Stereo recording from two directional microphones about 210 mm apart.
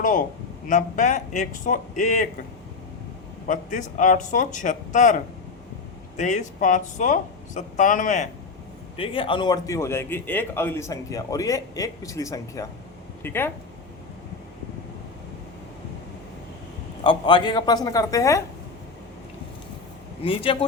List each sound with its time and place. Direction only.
0.0 s a man's voice: 40° left (ahead or behind)
3.4 s speech: 35° left (ahead or behind)
9.0 s a man's voice: 25° left (ahead or behind)
17.0 s a woman's voice: 20° left (ahead or behind)
20.2 s a woman's voice: 25° left (ahead or behind)